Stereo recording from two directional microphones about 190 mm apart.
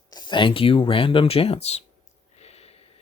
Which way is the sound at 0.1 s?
20° left (ahead or behind).